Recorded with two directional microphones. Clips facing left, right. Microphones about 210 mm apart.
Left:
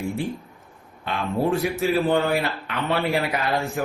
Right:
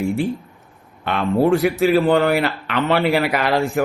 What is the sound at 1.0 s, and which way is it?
Speech, 70° right (ahead or behind).